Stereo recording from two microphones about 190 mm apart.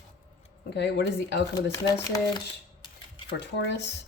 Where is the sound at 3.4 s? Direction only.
65° left (ahead or behind).